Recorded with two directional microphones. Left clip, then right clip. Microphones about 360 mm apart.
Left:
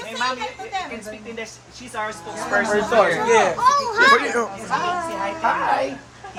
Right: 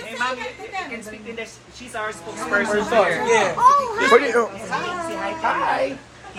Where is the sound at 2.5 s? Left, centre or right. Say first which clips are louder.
Left 1 dB; left.